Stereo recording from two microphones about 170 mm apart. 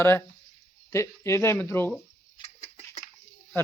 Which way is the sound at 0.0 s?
15° left (ahead or behind).